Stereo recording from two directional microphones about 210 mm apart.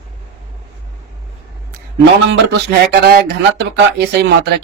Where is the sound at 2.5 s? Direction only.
50° right (ahead or behind).